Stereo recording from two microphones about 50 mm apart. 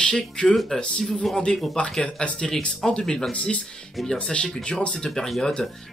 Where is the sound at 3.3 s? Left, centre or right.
Left.